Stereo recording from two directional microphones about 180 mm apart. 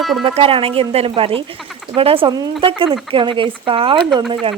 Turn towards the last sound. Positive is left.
turn(degrees=-30)  # may be behind; listen again after turning